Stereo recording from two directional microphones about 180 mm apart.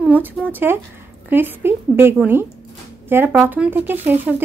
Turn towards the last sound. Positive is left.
turn(degrees=-10)  # may be behind; listen again after turning